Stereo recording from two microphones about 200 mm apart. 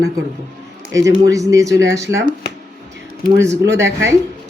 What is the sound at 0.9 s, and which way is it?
Speech, 15° right (ahead or behind).